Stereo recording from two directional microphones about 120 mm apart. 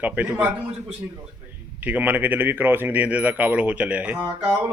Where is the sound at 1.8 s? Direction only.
15° right (ahead or behind).